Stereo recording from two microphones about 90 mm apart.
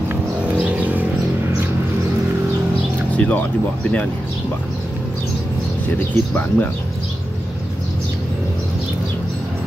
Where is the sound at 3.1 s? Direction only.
15° left (ahead or behind).